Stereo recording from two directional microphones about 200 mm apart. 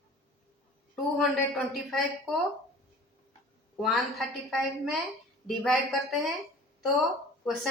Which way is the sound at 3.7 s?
Centre (ahead or behind).